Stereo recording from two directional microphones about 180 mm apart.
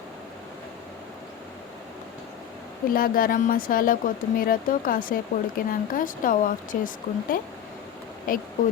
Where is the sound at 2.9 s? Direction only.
55° left (ahead or behind).